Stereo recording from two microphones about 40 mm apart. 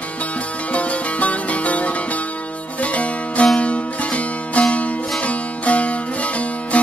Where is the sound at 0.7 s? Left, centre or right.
Left.